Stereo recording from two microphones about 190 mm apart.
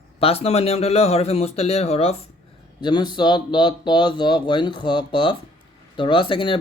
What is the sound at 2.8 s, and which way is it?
Speech, 25° left (ahead or behind).